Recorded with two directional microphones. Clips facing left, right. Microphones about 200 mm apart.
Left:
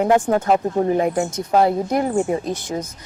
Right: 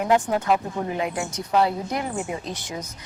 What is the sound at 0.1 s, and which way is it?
Speech, 45° left (ahead or behind).